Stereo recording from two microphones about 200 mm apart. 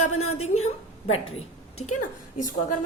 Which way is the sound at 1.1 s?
30° left (ahead or behind).